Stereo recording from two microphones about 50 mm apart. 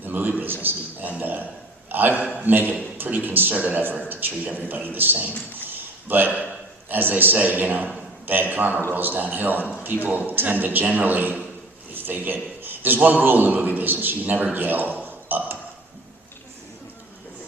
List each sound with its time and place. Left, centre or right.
0.0 s a man's voice: right
1.2 s a sound: right
1.9 s a man's voice: right
5.6 s a sound: right
6.8 s a man's voice: right
15.0 s ping: right